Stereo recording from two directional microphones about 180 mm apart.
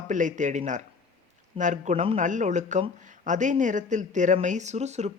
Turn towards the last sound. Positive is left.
turn(degrees=-40)  # may be behind; listen again after turning